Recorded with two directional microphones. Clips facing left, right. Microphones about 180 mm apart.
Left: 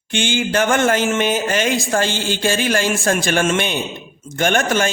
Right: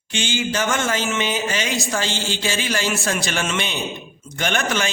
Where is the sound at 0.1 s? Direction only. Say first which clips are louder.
Left 5 dB; 55° left (ahead or behind).